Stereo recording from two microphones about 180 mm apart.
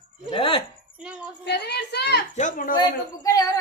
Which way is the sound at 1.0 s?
5° right (ahead or behind).